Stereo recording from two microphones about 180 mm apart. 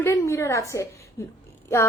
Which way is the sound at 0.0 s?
15° left (ahead or behind).